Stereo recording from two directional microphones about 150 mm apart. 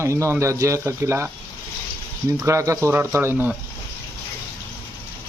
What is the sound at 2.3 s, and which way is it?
Speech, 20° right (ahead or behind).